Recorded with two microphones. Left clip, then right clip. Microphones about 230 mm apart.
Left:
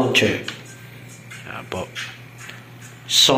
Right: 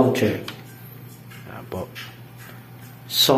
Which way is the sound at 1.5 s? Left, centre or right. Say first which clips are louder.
Left 3 dB; centre.